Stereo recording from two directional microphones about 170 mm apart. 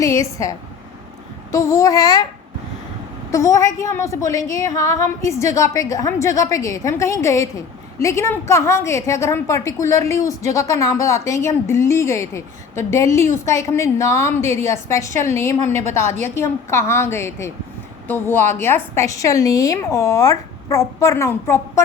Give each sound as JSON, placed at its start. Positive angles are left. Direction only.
{"t": 1.5, "sound": "a woman's voice", "side_deg": 20}
{"t": 3.3, "sound": "a woman's voice", "side_deg": 20}